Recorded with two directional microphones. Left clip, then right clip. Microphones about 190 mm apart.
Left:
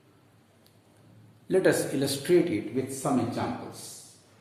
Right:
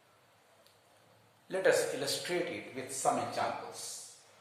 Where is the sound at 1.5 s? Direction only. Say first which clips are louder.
Left 5 dB; 35° left (ahead or behind).